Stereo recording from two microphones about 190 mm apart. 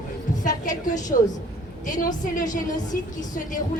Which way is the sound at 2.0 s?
45° left (ahead or behind).